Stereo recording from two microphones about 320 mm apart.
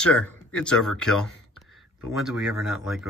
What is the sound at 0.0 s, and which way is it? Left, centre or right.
Speech, centre.